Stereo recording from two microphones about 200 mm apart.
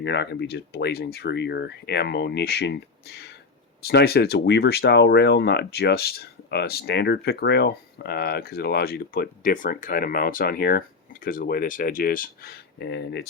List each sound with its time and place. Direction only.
0.0 s speech: 60° left (ahead or behind)